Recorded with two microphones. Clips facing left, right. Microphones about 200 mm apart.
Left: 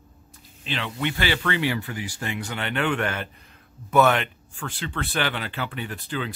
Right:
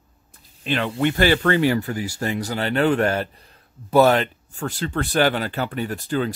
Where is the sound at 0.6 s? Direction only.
50° right (ahead or behind).